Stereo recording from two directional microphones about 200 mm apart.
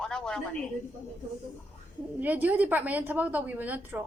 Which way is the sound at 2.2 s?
10° right (ahead or behind).